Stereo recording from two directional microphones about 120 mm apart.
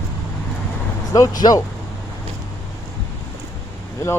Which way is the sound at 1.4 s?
30° left (ahead or behind).